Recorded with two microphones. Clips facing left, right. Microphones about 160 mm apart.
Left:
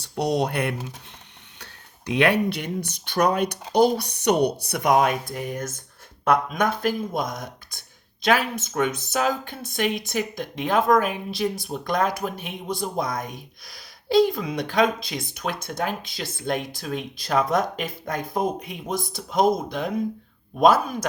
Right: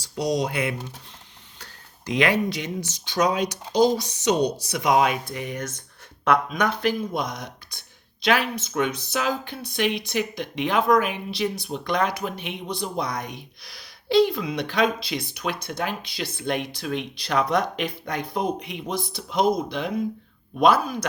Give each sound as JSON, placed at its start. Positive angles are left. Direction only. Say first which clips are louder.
{"t": 0.0, "sound": "speech", "louder": "left 1 dB", "side_deg": 60}
{"t": 2.0, "sound": "speech", "louder": "left 2 dB", "side_deg": 65}